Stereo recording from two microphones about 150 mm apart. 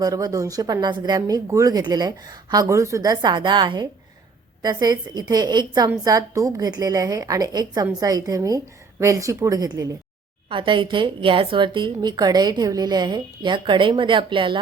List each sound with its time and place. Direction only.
0.0 s a woman's voice: 25° right (ahead or behind)